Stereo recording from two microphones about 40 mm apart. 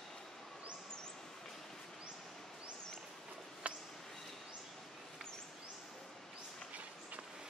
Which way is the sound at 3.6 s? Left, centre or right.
Right.